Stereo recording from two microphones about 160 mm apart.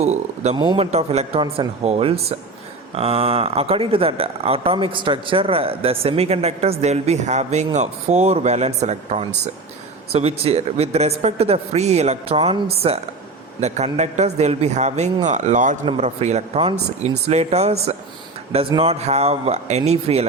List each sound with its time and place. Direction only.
0.0 s a man's voice: 45° right (ahead or behind)
0.5 s speech: 30° right (ahead or behind)
0.9 s a man's voice: 40° right (ahead or behind)